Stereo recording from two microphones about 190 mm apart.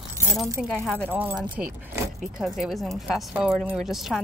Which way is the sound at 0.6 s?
5° left (ahead or behind).